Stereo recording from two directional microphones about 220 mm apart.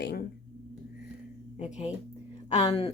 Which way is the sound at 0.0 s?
50° left (ahead or behind).